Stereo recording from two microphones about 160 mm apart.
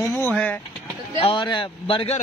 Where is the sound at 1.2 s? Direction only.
30° left (ahead or behind).